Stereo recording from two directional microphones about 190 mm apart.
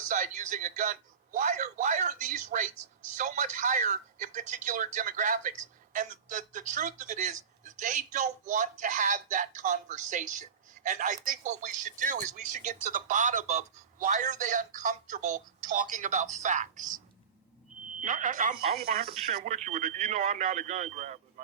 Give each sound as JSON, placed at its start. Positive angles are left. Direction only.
{"t": 0.1, "sound": "a man's voice", "side_deg": -40}
{"t": 18.0, "sound": "a man's voice", "side_deg": -40}
{"t": 18.8, "sound": "speech", "side_deg": -50}
{"t": 19.0, "sound": "a man's voice", "side_deg": -40}